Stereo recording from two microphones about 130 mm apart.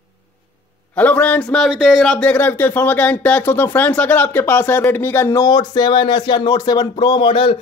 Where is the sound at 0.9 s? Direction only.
10° left (ahead or behind).